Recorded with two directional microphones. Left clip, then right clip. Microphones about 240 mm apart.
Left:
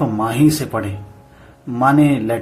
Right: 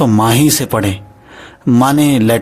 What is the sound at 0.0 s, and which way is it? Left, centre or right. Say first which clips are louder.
Speech: right 5 dB; right.